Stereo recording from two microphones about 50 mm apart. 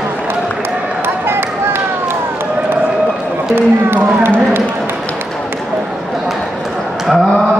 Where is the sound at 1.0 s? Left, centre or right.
Right.